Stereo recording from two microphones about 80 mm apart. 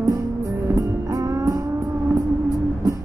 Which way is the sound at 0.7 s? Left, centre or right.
Right.